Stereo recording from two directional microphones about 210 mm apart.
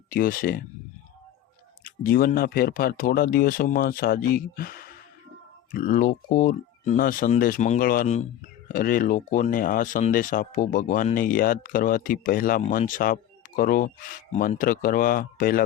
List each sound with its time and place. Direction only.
0.1 s speech: 40° left (ahead or behind)
1.8 s speech: 45° left (ahead or behind)